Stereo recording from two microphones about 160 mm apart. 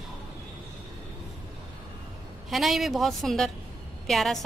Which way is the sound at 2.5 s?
Centre (ahead or behind).